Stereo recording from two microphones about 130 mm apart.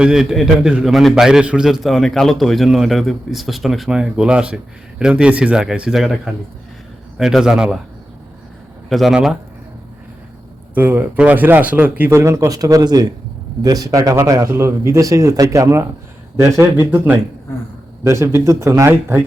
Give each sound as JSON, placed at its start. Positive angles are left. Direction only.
{"t": 0.0, "sound": "a man's voice", "side_deg": -5}
{"t": 7.2, "sound": "a man's voice", "side_deg": -5}
{"t": 8.9, "sound": "a man's voice", "side_deg": 0}
{"t": 10.8, "sound": "speech", "side_deg": -15}